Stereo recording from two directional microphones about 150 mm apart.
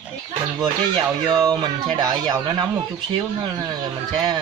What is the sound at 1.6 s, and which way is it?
Speech, 25° right (ahead or behind).